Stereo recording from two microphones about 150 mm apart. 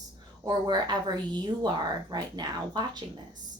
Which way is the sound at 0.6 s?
30° right (ahead or behind).